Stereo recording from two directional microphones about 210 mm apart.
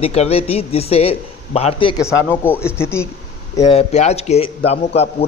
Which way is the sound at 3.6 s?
30° left (ahead or behind).